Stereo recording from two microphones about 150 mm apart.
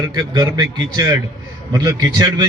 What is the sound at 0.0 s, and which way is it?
A man's voice, 25° right (ahead or behind).